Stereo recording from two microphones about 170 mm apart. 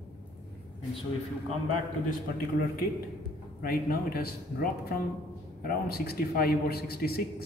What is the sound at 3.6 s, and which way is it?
A man's voice, 60° left (ahead or behind).